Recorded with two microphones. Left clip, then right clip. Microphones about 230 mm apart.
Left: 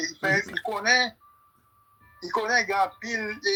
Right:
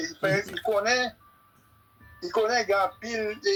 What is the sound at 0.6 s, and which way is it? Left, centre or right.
Speech, left.